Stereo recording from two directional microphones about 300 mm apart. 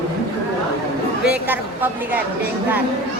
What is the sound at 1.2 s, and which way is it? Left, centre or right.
Speech, centre.